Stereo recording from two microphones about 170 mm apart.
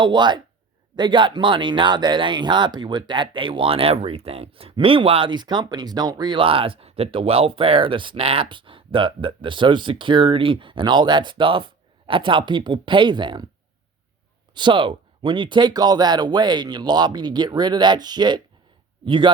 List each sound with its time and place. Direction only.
0.0 s speech: 25° right (ahead or behind)
14.5 s speech: 30° right (ahead or behind)